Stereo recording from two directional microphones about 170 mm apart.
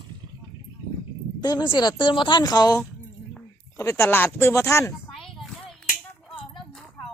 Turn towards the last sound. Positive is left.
turn(degrees=0)  # may be behind; listen again after turning